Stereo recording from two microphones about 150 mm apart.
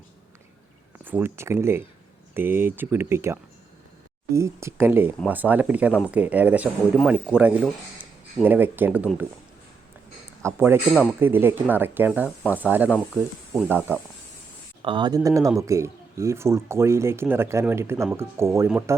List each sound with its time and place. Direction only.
1.0 s speech: 15° right (ahead or behind)
10.4 s speech: 15° right (ahead or behind)
13.1 s speech: centre (ahead or behind)
13.7 s speech: 15° right (ahead or behind)
14.8 s speech: 35° right (ahead or behind); by 18.9 s 20° right (ahead or behind)